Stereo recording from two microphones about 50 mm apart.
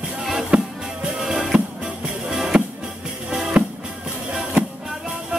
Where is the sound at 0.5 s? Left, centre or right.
Centre.